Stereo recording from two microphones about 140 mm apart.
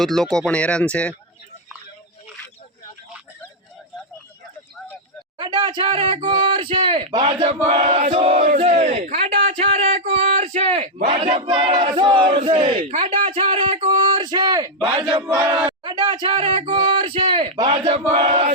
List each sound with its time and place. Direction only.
0.0 s speech: 5° left (ahead or behind)
5.4 s speech: 30° right (ahead or behind)
7.3 s battle cry: 45° right (ahead or behind)
7.9 s crowd: 55° right (ahead or behind)
8.1 s battle cry: 45° right (ahead or behind)
8.5 s a sound: 50° right (ahead or behind)
11.5 s battle cry: 35° right (ahead or behind)